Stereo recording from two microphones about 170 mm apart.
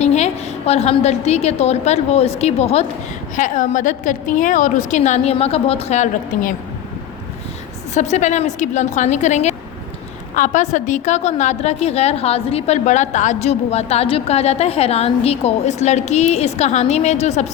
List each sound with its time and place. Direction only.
0.0 s a woman's voice: 40° left (ahead or behind)
7.9 s a woman's voice: 40° left (ahead or behind)